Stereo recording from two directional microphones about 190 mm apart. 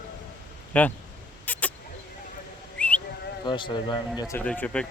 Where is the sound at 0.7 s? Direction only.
10° left (ahead or behind).